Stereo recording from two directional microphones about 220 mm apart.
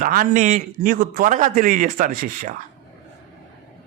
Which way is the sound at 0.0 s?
40° right (ahead or behind).